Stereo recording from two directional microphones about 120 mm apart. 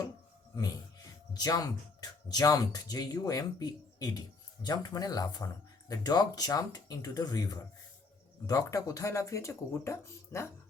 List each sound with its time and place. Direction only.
1.3 s speech: 35° left (ahead or behind)